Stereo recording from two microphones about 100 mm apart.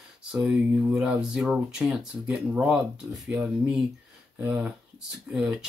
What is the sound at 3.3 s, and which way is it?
Speech, 15° right (ahead or behind).